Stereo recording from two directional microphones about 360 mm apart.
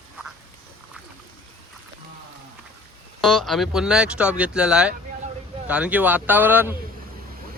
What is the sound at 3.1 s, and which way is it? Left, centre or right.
Speech, centre.